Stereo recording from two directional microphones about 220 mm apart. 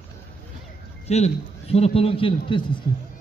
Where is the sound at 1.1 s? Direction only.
30° left (ahead or behind).